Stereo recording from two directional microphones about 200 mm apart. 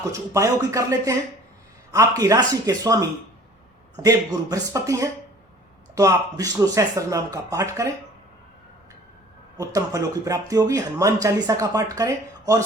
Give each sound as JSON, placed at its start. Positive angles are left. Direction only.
{"t": 0.1, "sound": "speech", "side_deg": -15}
{"t": 9.6, "sound": "speech", "side_deg": -15}